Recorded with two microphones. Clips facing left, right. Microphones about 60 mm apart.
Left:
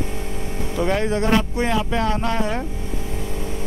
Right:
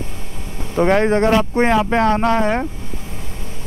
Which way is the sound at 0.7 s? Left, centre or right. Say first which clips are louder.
Right 7 dB; right.